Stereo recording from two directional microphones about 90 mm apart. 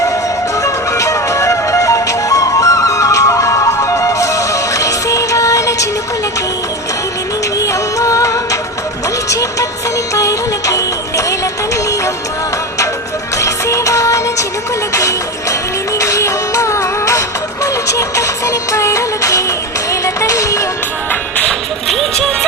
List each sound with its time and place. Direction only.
0.6 s music: 35° left (ahead or behind)
7.6 s music: 35° left (ahead or behind)
13.3 s music: 35° left (ahead or behind)
21.4 s music: 5° left (ahead or behind)